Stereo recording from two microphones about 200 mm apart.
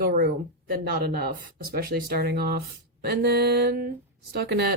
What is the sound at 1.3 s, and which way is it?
Speech, 45° right (ahead or behind).